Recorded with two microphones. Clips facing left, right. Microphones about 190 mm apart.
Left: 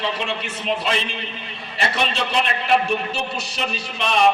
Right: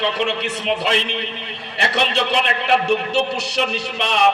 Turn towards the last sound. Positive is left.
turn(degrees=-70)  # may be behind; listen again after turning